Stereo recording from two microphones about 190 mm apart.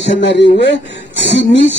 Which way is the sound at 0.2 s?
70° left (ahead or behind).